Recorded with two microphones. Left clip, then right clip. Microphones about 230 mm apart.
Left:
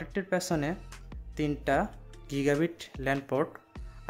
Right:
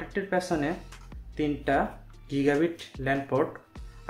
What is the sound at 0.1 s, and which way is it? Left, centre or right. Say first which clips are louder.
Speech: right 2 dB; left.